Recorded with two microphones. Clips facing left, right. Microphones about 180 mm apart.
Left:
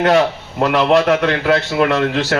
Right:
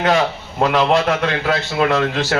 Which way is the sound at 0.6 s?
60° left (ahead or behind).